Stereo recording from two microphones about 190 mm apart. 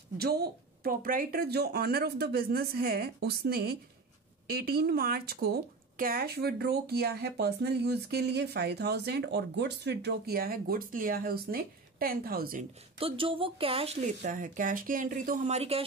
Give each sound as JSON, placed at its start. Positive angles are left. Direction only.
{"t": 0.2, "sound": "speech", "side_deg": -55}
{"t": 13.0, "sound": "speech", "side_deg": -30}